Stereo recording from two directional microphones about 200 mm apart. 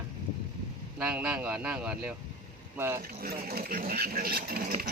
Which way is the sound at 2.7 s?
15° right (ahead or behind).